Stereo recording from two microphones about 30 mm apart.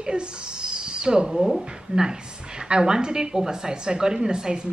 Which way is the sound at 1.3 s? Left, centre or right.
Centre.